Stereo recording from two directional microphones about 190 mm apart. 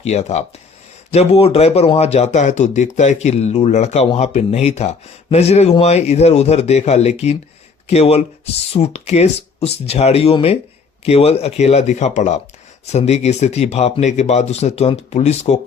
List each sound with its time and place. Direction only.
0.0 s speech: 35° left (ahead or behind)